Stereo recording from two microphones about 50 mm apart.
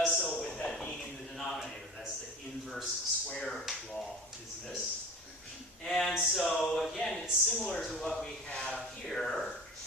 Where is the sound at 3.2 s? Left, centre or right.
Centre.